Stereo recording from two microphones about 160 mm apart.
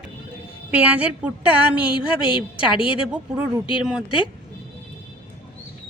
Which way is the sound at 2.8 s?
5° right (ahead or behind).